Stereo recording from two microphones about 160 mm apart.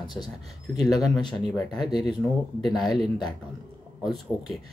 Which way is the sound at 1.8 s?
25° left (ahead or behind).